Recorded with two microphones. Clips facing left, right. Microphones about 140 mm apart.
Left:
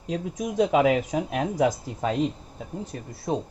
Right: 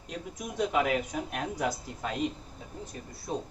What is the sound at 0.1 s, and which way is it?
Speech, 90° left.